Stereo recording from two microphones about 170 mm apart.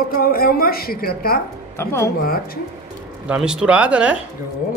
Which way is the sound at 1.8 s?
15° left (ahead or behind).